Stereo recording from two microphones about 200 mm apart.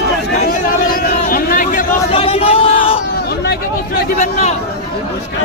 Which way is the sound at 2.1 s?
30° left (ahead or behind).